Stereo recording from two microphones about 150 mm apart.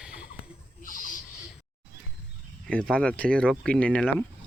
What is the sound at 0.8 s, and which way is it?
Owl, 60° left (ahead or behind).